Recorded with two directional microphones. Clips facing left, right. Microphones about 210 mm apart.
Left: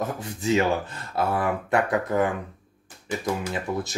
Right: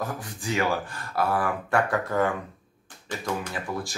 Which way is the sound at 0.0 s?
25° left (ahead or behind).